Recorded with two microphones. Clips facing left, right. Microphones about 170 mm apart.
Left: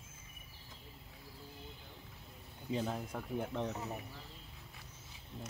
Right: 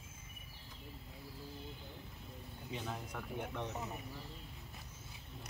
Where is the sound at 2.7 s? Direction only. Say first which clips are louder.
Left 6 dB; 35° left (ahead or behind).